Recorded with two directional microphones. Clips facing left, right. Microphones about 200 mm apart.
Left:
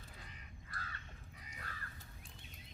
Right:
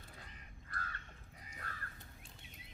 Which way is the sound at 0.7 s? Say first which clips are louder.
Right 3 dB; 50° right (ahead or behind).